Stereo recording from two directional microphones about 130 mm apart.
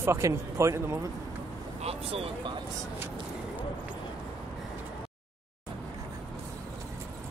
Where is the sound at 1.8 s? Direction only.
50° right (ahead or behind).